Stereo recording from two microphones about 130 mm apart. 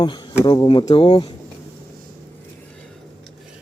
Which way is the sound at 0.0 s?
35° left (ahead or behind).